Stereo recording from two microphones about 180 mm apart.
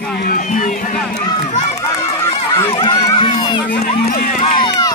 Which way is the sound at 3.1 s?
25° left (ahead or behind).